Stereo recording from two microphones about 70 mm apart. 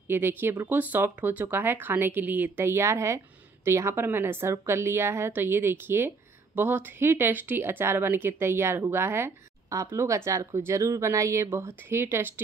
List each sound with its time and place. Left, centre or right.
0.1 s a woman's voice: right
9.7 s speech: right
11.4 s a woman's voice: right